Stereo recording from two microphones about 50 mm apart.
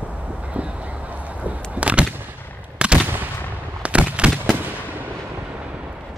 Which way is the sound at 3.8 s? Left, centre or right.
Right.